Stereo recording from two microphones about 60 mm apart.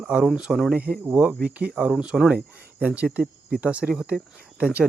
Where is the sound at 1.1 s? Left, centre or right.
Centre.